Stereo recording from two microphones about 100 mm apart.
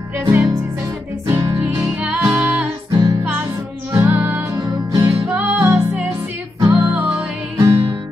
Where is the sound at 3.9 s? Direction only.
25° right (ahead or behind).